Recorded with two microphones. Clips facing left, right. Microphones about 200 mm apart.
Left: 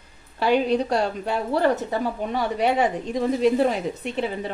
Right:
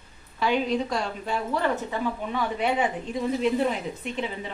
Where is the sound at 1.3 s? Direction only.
40° left (ahead or behind).